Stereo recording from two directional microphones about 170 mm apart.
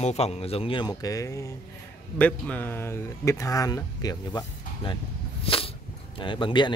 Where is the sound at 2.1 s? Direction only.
10° left (ahead or behind).